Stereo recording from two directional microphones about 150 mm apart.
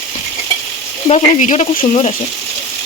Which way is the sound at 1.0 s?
55° left (ahead or behind).